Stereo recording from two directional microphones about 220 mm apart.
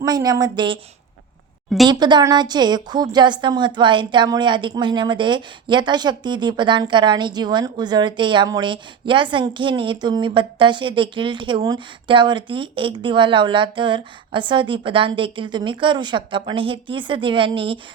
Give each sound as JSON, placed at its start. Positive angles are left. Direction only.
{"t": 0.0, "sound": "speech", "side_deg": -15}
{"t": 1.9, "sound": "a woman's voice", "side_deg": -20}